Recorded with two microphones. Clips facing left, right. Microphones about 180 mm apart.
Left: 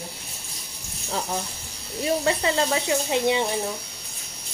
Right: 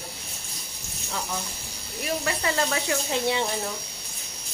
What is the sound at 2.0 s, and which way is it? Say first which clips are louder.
Speech: left 6 dB; 25° left (ahead or behind).